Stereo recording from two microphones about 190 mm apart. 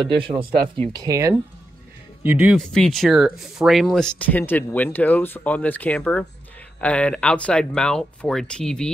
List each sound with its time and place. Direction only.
0.0 s speech: 25° right (ahead or behind)
0.9 s speech: 15° right (ahead or behind)
2.5 s speech: 5° left (ahead or behind)